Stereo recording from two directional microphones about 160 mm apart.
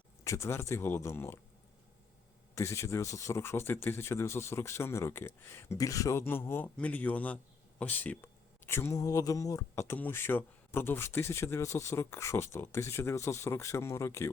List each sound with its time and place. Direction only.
0.3 s speech: 15° left (ahead or behind)
2.6 s speech: 15° left (ahead or behind)